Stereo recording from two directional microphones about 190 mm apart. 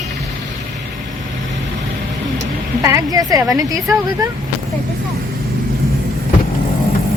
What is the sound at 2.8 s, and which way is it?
Speech, 15° right (ahead or behind).